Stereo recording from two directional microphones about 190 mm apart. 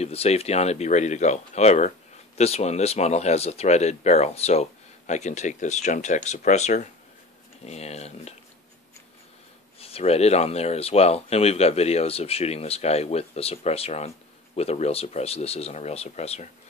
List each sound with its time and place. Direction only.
0.0 s speech: 35° left (ahead or behind)
9.8 s speech: 30° left (ahead or behind)